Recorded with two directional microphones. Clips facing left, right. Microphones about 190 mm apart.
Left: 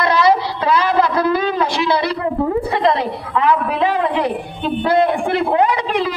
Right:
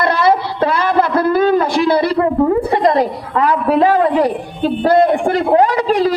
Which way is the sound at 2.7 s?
45° right (ahead or behind).